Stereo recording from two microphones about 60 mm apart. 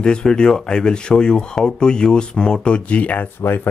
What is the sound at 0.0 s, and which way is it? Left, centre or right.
Speech, centre.